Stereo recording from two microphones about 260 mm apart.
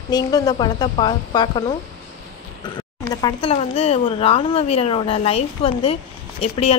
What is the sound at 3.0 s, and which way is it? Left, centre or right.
Speech, centre.